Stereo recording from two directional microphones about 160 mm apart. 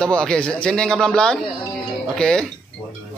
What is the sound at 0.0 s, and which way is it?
A man's voice, 5° left (ahead or behind).